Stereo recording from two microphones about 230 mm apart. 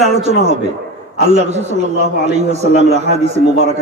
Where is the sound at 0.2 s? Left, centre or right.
Right.